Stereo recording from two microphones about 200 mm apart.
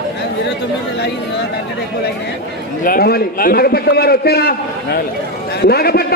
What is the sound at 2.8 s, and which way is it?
A man's voice, 50° left (ahead or behind).